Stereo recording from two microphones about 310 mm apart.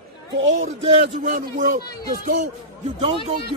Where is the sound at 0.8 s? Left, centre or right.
Right.